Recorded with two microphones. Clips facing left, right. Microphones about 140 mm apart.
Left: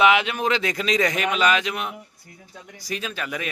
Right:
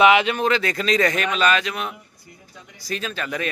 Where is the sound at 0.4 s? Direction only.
15° left (ahead or behind).